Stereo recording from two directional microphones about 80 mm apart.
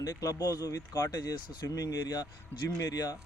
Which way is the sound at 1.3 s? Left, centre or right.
Left.